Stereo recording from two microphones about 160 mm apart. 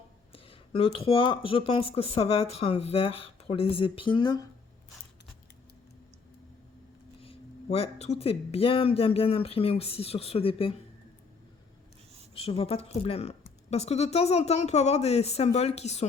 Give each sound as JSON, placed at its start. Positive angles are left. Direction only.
{"t": 0.3, "sound": "speech", "side_deg": 35}
{"t": 7.2, "sound": "speech", "side_deg": 35}
{"t": 12.3, "sound": "speech", "side_deg": 35}